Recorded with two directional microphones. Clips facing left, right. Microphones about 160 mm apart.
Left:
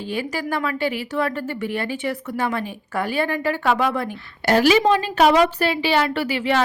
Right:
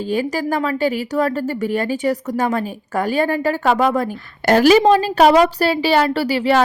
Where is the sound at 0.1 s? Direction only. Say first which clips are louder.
Right 5 dB; 40° right (ahead or behind).